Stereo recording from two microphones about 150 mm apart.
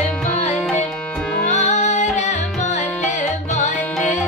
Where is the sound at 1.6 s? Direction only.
55° left (ahead or behind).